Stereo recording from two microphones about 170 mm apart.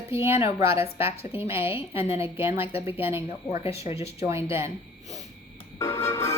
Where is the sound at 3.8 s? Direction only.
35° left (ahead or behind).